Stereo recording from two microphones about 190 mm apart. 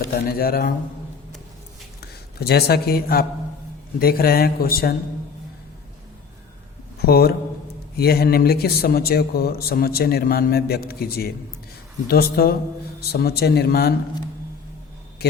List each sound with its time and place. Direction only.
0.1 s a man's voice: 55° left (ahead or behind)
2.4 s a man's voice: 55° left (ahead or behind)
7.0 s a man's voice: 55° left (ahead or behind)
15.2 s a sound: 55° left (ahead or behind)